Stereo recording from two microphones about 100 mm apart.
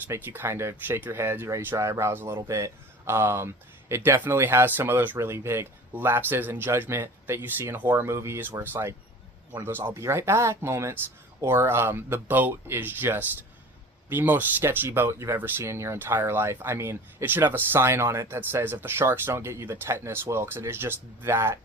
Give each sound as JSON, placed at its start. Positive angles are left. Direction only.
{"t": 0.1, "sound": "speech", "side_deg": -25}